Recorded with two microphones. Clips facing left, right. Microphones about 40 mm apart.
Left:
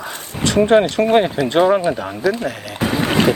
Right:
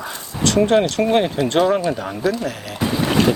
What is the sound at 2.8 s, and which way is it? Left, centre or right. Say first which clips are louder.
Boat: left 1 dB; left.